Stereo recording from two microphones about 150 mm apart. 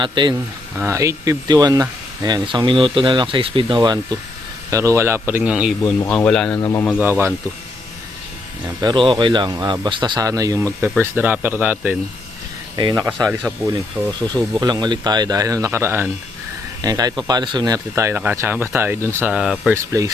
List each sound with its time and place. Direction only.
0.0 s speech: 30° right (ahead or behind)
0.8 s speech: 20° right (ahead or behind)
5.8 s speech: 15° left (ahead or behind)
6.6 s speech: 20° left (ahead or behind)
7.0 s speech: 15° right (ahead or behind)
8.6 s speech: 30° right (ahead or behind); by 11.9 s 10° right (ahead or behind)
12.7 s speech: 25° right (ahead or behind)
14.3 s speech: 25° right (ahead or behind)
16.8 s speech: 25° right (ahead or behind)
19.3 s speech: 5° right (ahead or behind)
19.7 s speech: 20° right (ahead or behind)